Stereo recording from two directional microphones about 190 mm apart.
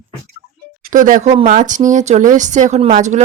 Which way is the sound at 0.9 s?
45° right (ahead or behind).